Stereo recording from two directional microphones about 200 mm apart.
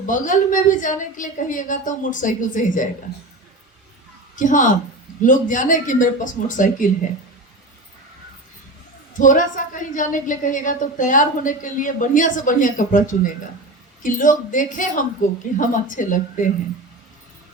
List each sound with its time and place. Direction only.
0.0 s a woman's voice: 40° left (ahead or behind)
4.4 s a woman's voice: 40° left (ahead or behind)
9.1 s a woman's voice: 40° left (ahead or behind)